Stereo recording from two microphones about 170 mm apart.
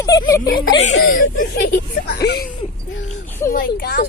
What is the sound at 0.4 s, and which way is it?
Speech, 60° left (ahead or behind).